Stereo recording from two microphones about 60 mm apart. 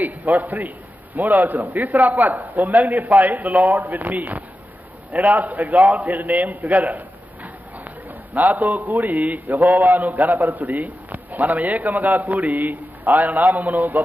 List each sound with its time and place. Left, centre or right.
0.0 s a man's voice: right